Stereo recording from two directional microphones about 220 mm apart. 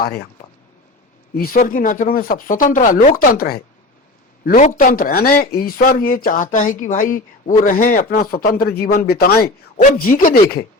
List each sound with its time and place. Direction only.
0.0 s speech: 45° left (ahead or behind)
1.4 s a man's voice: 40° left (ahead or behind)